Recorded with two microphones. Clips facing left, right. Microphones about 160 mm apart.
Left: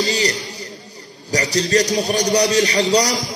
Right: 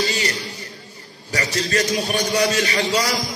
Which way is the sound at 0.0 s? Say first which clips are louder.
Left 3 dB; 35° left (ahead or behind).